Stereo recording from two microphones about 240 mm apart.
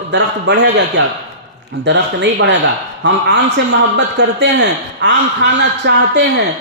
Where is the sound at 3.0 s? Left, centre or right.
Right.